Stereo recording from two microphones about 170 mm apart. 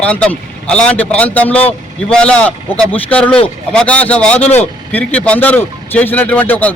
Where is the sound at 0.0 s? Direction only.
5° left (ahead or behind).